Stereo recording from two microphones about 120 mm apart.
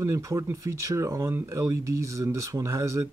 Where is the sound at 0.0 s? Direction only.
25° right (ahead or behind).